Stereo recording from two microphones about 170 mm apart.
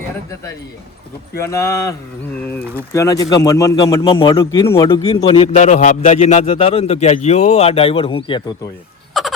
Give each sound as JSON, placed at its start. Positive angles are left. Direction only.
{"t": 1.4, "sound": "speech", "side_deg": 15}
{"t": 5.0, "sound": "a man's voice", "side_deg": 35}
{"t": 5.5, "sound": "a man's voice", "side_deg": 45}
{"t": 9.2, "sound": "a sound", "side_deg": 0}